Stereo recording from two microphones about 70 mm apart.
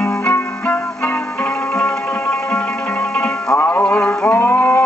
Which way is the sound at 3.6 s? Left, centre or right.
Left.